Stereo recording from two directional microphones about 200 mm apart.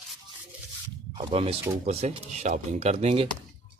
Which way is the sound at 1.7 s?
30° right (ahead or behind).